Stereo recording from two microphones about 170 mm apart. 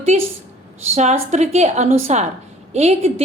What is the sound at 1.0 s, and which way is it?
A woman's voice, 40° right (ahead or behind).